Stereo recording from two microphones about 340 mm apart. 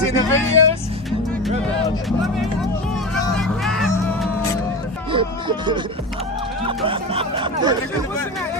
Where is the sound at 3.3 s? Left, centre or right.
Centre.